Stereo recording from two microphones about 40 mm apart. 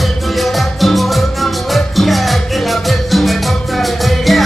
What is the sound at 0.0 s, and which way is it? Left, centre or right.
Music, centre.